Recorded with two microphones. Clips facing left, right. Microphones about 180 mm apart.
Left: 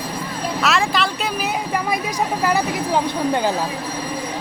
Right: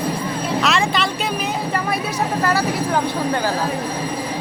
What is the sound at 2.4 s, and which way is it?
Speech, 15° left (ahead or behind).